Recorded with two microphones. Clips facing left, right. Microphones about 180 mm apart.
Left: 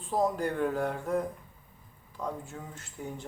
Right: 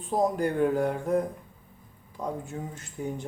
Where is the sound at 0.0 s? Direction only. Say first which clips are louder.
Right 3 dB; 15° right (ahead or behind).